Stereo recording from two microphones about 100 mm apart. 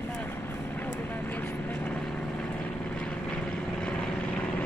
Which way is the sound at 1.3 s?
15° left (ahead or behind).